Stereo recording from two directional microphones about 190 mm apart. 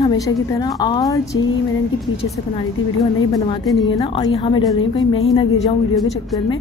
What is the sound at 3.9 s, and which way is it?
A woman's voice, 25° left (ahead or behind).